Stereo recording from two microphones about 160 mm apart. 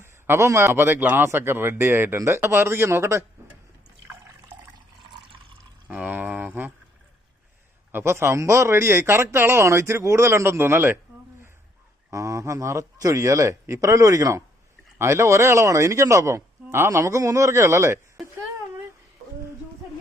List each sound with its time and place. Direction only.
0.0 s a man's voice: 15° right (ahead or behind)
5.9 s a sound: 10° right (ahead or behind)
7.9 s a man's voice: 15° right (ahead or behind)
12.1 s speech: 20° right (ahead or behind)